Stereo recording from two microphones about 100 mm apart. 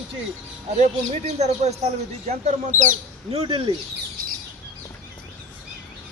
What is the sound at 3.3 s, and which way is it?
Speech, 65° right (ahead or behind).